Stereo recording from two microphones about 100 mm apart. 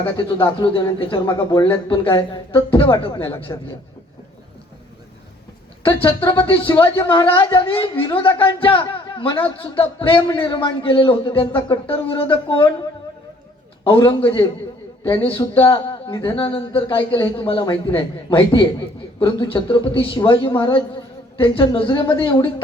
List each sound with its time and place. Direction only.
0.0 s speech: 55° left (ahead or behind)
1.2 s speech: 40° left (ahead or behind)
1.9 s speech: 55° left (ahead or behind)
3.5 s a man's voice: 35° left (ahead or behind)
6.0 s speech: 55° left (ahead or behind)
13.8 s speech: 60° left (ahead or behind)
15.7 s a sound: 50° left (ahead or behind)
16.2 s speech: 60° left (ahead or behind)